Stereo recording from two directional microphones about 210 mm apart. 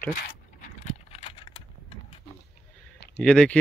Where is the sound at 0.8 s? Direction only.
30° left (ahead or behind).